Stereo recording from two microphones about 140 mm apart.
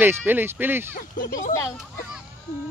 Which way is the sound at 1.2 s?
65° left (ahead or behind).